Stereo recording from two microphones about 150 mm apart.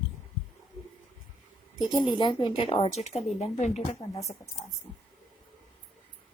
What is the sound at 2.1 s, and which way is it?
Speech, 30° left (ahead or behind).